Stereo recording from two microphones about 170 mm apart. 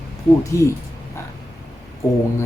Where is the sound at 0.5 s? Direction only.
15° left (ahead or behind).